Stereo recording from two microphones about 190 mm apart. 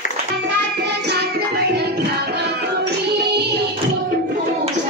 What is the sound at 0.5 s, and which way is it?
Music, 60° right (ahead or behind).